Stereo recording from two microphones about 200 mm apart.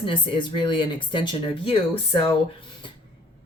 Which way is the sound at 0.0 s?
25° left (ahead or behind).